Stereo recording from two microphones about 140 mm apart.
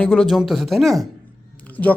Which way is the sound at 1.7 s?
10° left (ahead or behind).